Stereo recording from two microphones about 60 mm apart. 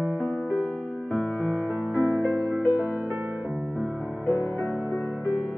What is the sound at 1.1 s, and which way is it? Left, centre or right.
Music, right.